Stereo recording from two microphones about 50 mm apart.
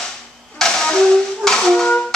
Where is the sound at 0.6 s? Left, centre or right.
Centre.